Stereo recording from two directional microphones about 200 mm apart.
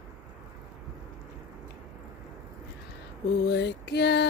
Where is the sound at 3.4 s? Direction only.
55° left (ahead or behind).